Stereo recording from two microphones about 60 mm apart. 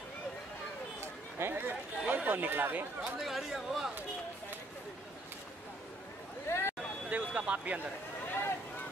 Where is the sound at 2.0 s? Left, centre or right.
Right.